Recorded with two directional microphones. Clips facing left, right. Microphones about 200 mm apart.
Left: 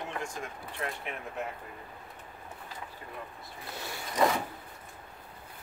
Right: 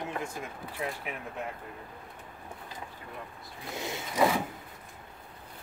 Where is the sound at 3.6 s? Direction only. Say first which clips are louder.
Right 4 dB; 20° right (ahead or behind).